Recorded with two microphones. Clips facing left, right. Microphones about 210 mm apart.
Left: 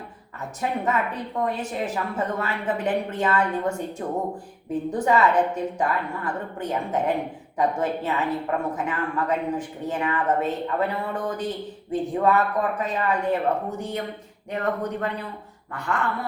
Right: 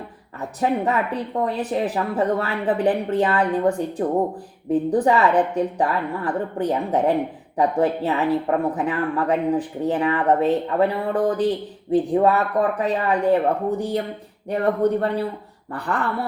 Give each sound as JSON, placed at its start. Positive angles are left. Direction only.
{"t": 0.9, "sound": "speech", "side_deg": -35}